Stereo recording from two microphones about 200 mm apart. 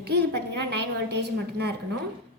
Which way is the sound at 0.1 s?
55° right (ahead or behind).